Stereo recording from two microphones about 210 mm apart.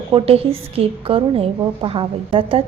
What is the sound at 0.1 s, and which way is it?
A woman's voice, 30° right (ahead or behind).